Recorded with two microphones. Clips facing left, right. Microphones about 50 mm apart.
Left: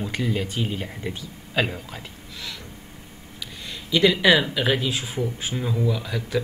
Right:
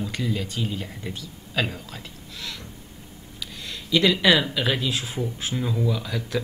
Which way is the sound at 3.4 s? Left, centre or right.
Centre.